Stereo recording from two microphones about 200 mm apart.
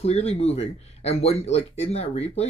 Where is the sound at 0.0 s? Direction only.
30° left (ahead or behind).